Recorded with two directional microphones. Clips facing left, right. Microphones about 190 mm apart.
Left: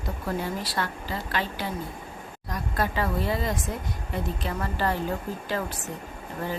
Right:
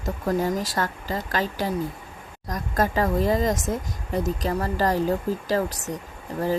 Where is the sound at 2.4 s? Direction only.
45° right (ahead or behind).